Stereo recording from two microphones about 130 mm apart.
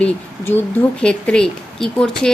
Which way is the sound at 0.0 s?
15° left (ahead or behind).